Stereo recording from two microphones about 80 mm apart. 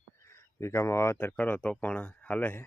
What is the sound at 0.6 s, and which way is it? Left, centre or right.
Speech, left.